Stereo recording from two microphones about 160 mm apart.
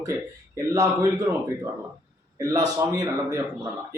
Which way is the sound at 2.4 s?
20° right (ahead or behind).